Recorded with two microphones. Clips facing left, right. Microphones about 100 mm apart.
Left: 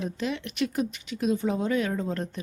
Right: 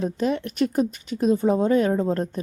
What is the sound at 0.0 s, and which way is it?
A woman's voice, 40° right (ahead or behind).